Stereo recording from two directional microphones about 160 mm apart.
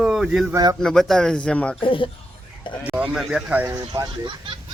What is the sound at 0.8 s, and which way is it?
Speech, 5° left (ahead or behind).